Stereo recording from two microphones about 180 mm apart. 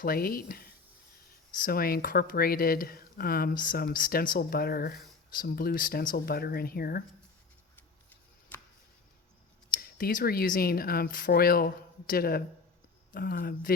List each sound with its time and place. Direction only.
0.0 s speech: 55° left (ahead or behind)
7.8 s a sound: 10° left (ahead or behind)
9.7 s speech: 50° left (ahead or behind)